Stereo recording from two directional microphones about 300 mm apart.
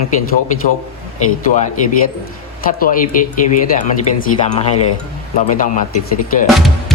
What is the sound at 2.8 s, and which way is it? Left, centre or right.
Speech, left.